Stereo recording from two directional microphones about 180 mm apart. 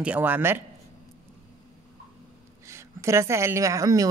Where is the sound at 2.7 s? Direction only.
15° right (ahead or behind).